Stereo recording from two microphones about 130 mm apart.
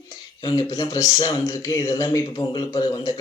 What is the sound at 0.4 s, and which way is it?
Speech, 30° left (ahead or behind).